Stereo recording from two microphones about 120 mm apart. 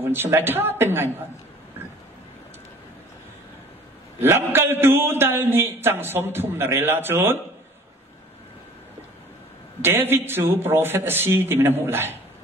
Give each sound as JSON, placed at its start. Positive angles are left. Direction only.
{"t": 0.0, "sound": "a man's voice", "side_deg": -20}
{"t": 4.2, "sound": "a man's voice", "side_deg": -20}
{"t": 9.8, "sound": "a man's voice", "side_deg": -20}